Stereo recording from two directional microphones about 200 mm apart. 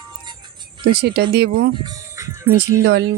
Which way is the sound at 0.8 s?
55° right (ahead or behind).